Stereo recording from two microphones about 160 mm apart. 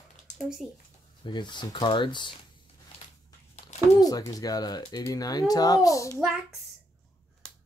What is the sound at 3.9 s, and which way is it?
Speech, 25° left (ahead or behind).